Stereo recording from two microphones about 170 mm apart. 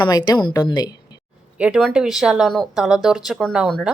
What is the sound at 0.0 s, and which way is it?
Speech, 25° left (ahead or behind).